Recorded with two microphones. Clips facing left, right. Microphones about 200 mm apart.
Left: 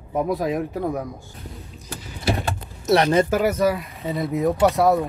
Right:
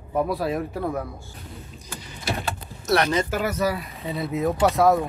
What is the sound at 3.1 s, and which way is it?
Speech, 50° left (ahead or behind).